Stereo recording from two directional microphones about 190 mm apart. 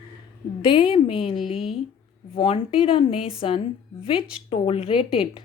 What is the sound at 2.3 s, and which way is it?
A woman's voice, 30° left (ahead or behind).